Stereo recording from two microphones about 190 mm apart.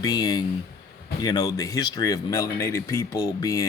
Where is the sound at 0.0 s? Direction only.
20° left (ahead or behind).